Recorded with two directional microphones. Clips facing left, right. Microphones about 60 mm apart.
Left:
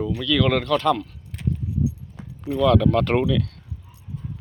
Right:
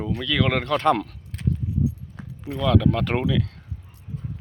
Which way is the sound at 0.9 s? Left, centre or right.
Right.